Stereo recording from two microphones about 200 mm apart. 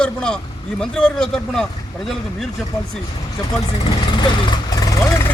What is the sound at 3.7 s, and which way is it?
Vehicle, 30° left (ahead or behind).